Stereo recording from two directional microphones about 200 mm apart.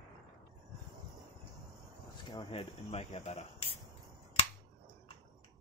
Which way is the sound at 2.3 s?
25° left (ahead or behind).